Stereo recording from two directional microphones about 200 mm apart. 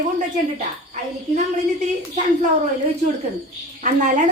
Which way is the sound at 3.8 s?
40° right (ahead or behind).